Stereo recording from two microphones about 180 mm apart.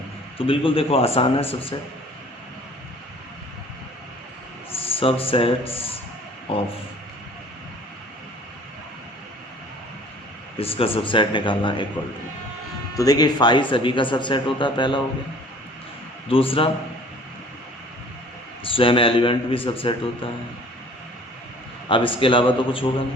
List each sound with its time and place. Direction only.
0.3 s speech: 30° left (ahead or behind)
4.7 s speech: 30° left (ahead or behind)
10.6 s speech: 30° left (ahead or behind)
13.0 s speech: 20° left (ahead or behind)
16.3 s speech: 30° left (ahead or behind)
18.6 s speech: 30° left (ahead or behind)
21.8 s speech: 30° left (ahead or behind)